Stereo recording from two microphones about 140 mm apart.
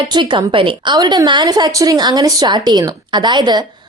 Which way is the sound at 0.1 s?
35° right (ahead or behind).